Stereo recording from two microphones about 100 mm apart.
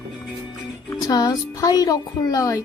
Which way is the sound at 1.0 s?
40° left (ahead or behind).